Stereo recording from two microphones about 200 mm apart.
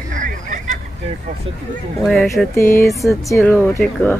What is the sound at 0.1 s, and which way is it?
Hubbub, 40° right (ahead or behind).